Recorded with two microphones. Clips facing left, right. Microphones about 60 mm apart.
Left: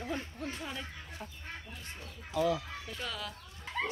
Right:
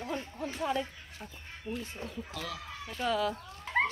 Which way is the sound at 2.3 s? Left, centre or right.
Centre.